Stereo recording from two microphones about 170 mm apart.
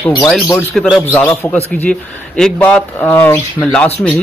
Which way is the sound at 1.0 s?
15° left (ahead or behind).